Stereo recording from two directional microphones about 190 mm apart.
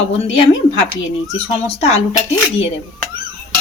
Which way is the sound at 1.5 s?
35° left (ahead or behind).